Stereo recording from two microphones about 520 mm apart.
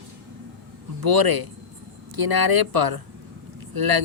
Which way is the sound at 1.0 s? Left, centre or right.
Right.